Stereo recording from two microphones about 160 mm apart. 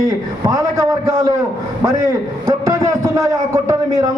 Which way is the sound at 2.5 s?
20° right (ahead or behind).